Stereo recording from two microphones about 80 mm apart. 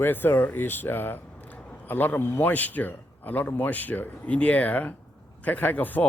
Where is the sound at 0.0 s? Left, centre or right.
Left.